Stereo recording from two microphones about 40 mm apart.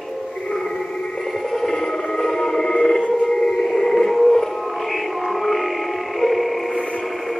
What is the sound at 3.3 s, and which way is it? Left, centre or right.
Music, centre.